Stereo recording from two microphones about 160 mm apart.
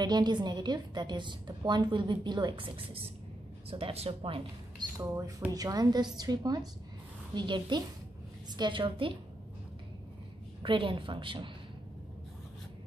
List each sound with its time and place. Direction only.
0.0 s a woman's voice: 25° right (ahead or behind)
4.9 s a woman's voice: 20° right (ahead or behind)
10.6 s speech: 30° right (ahead or behind)